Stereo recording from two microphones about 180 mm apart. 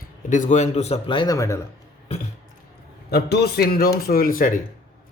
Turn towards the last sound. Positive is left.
turn(degrees=50)  # may be behind; listen again after turning